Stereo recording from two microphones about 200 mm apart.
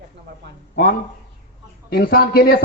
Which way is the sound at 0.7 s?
50° left (ahead or behind).